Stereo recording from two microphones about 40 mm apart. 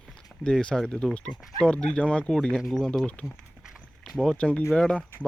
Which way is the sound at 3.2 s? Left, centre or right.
Left.